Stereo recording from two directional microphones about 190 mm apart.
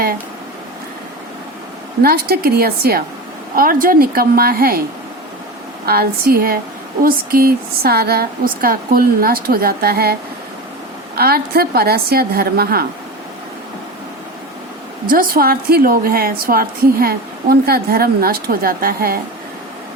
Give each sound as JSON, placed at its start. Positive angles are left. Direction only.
{"t": 2.0, "sound": "a woman's voice", "side_deg": -55}
{"t": 5.8, "sound": "a woman's voice", "side_deg": -55}
{"t": 15.0, "sound": "a woman's voice", "side_deg": -50}